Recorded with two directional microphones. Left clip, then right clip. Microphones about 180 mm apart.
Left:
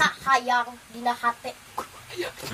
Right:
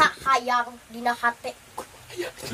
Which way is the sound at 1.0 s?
20° right (ahead or behind).